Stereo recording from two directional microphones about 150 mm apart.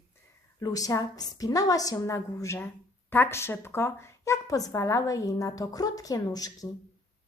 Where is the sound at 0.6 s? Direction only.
25° left (ahead or behind).